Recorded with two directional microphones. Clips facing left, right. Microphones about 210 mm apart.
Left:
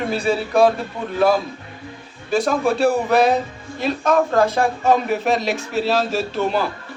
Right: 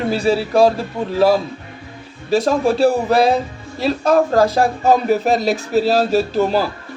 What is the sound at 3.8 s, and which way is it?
Speech, 35° right (ahead or behind).